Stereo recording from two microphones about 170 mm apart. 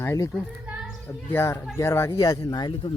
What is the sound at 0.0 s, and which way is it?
A child's voice, 15° left (ahead or behind).